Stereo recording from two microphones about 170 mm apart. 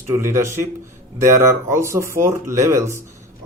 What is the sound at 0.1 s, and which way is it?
Speech, 15° right (ahead or behind).